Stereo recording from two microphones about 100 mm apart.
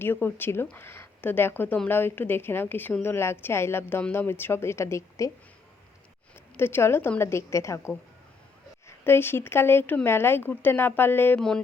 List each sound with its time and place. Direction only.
0.0 s speech: 20° left (ahead or behind)
6.6 s speech: 20° left (ahead or behind)
11.3 s music: 5° left (ahead or behind)